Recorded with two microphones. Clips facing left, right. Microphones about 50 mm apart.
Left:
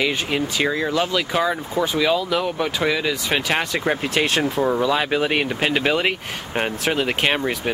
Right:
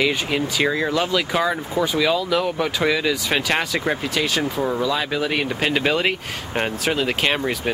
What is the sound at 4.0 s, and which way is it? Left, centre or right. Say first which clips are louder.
Speech: left 2 dB; left.